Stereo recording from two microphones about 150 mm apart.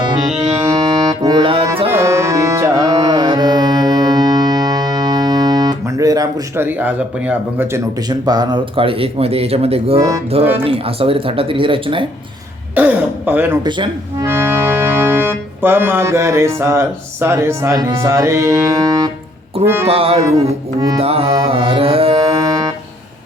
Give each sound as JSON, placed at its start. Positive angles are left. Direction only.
{"t": 0.6, "sound": "music", "side_deg": -20}
{"t": 1.9, "sound": "music", "side_deg": -20}
{"t": 8.2, "sound": "speech", "side_deg": -25}
{"t": 12.7, "sound": "speech", "side_deg": -10}
{"t": 13.7, "sound": "speech", "side_deg": -30}
{"t": 14.3, "sound": "organ", "side_deg": -15}
{"t": 19.6, "sound": "speech", "side_deg": -15}
{"t": 19.9, "sound": "speech", "side_deg": -40}
{"t": 22.4, "sound": "music", "side_deg": -20}